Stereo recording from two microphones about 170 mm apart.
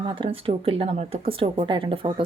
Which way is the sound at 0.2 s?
30° right (ahead or behind).